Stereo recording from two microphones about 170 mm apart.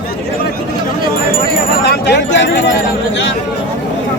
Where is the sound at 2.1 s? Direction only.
90° left.